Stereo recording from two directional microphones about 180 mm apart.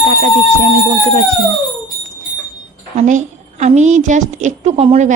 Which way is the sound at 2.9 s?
40° right (ahead or behind).